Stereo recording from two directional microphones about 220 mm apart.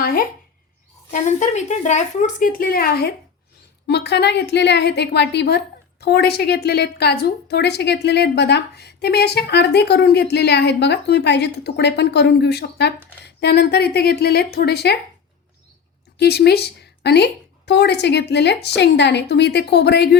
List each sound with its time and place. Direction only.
0.0 s a sound: 40° left (ahead or behind)
1.1 s a woman's voice: 35° left (ahead or behind)
16.1 s a woman's voice: 50° left (ahead or behind)